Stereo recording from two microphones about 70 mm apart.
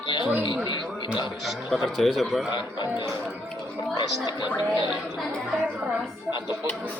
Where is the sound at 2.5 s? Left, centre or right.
Left.